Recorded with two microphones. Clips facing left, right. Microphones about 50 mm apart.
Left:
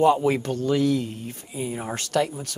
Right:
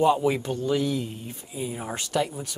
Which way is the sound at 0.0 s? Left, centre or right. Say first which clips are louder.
Left 2 dB; left.